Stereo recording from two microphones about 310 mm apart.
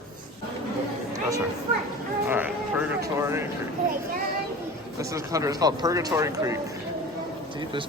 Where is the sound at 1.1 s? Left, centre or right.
Centre.